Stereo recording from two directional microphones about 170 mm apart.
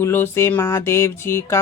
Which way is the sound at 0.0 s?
15° left (ahead or behind).